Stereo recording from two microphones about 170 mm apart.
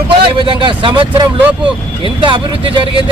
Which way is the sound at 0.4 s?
30° right (ahead or behind).